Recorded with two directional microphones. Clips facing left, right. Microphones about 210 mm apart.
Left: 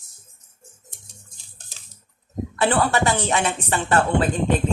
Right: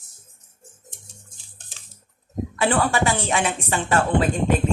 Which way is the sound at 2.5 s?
10° right (ahead or behind).